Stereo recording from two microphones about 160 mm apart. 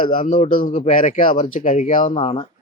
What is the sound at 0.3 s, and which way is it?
A man's voice, 50° left (ahead or behind).